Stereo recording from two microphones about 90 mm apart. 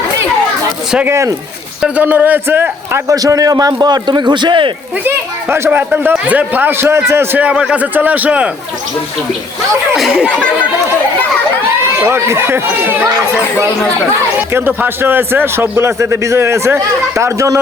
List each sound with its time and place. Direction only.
1.0 s speech: 30° right (ahead or behind)
1.8 s a man's voice: 20° right (ahead or behind)
3.1 s a man's voice: 40° right (ahead or behind); by 4.7 s 60° right (ahead or behind)
5.0 s a man's voice: 25° right (ahead or behind)
9.9 s speech: 5° right (ahead or behind)
12.0 s a man's voice: 30° right (ahead or behind)
14.5 s a man's voice: 25° right (ahead or behind)